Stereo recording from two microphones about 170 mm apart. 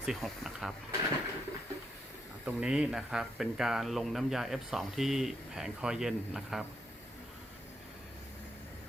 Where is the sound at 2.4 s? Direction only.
5° right (ahead or behind).